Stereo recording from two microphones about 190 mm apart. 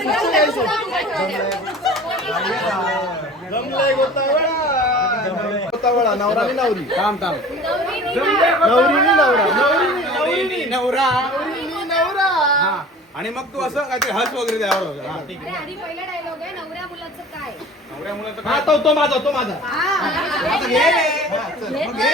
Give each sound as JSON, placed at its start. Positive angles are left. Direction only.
{"t": 0.0, "sound": "chatter", "side_deg": 0}
{"t": 3.5, "sound": "speech", "side_deg": 55}
{"t": 5.8, "sound": "a man's voice", "side_deg": 0}
{"t": 11.8, "sound": "a sound", "side_deg": 0}
{"t": 13.2, "sound": "a man's voice", "side_deg": 0}
{"t": 18.4, "sound": "a man's voice", "side_deg": 0}